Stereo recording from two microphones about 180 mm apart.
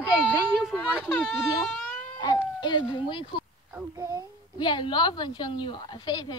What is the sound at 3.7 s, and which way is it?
Speech, 15° right (ahead or behind).